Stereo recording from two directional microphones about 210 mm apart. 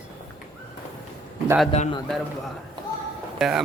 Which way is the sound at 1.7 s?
30° left (ahead or behind).